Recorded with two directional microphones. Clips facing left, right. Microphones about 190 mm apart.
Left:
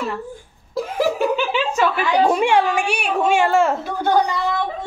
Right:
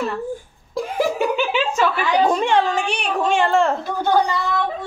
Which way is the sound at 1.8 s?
10° left (ahead or behind).